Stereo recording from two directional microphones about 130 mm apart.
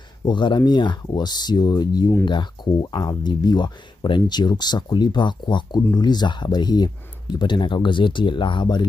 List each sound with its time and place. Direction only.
0.2 s speech: 35° left (ahead or behind)